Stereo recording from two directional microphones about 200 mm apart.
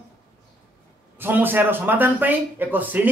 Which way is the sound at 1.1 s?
10° right (ahead or behind).